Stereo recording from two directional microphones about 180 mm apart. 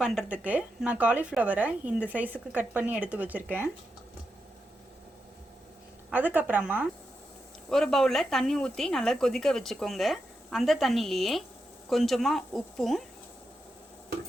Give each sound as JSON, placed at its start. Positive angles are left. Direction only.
{"t": 0.0, "sound": "a woman's voice", "side_deg": -5}
{"t": 6.1, "sound": "a woman's voice", "side_deg": -10}
{"t": 7.7, "sound": "speech", "side_deg": 0}